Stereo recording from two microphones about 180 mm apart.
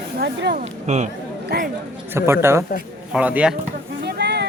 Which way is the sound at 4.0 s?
65° right (ahead or behind).